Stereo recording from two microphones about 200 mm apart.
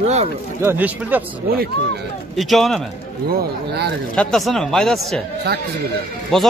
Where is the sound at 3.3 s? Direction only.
50° right (ahead or behind).